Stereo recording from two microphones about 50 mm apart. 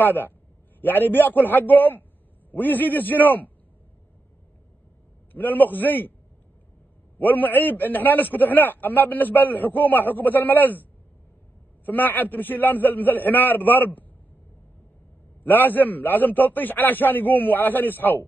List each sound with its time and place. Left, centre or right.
0.0 s a man's voice: left
5.3 s a man's voice: left
7.2 s a man's voice: left
15.4 s a man's voice: left